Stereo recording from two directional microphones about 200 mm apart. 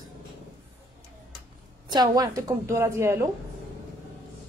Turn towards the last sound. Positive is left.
turn(degrees=-10)  # may be behind; listen again after turning